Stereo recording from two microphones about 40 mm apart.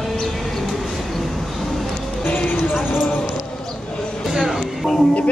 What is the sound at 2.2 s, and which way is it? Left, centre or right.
Music, left.